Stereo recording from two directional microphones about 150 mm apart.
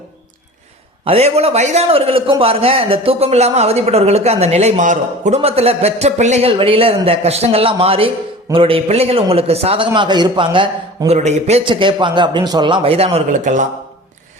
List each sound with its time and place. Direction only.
1.0 s a man's voice: 40° right (ahead or behind)
11.1 s a man's voice: 45° right (ahead or behind)
13.4 s speech: 55° right (ahead or behind)